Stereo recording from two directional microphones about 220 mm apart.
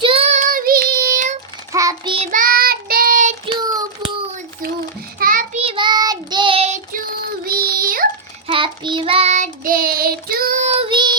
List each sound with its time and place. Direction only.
0.0 s child singing: 25° right (ahead or behind)
1.7 s child singing: 15° right (ahead or behind)
2.1 s child singing: 30° right (ahead or behind)
3.4 s child singing: 20° right (ahead or behind)
5.2 s child singing: 40° right (ahead or behind)
5.6 s child singing: 20° right (ahead or behind)
7.4 s child singing: 40° right (ahead or behind)
8.4 s child singing: 25° right (ahead or behind)